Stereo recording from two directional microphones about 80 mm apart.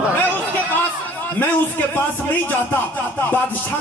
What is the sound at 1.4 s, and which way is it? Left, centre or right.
A man's voice, left.